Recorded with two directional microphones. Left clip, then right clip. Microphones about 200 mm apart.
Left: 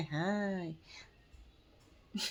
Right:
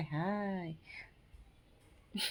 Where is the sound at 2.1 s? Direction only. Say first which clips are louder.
Right 1 dB; 10° left (ahead or behind).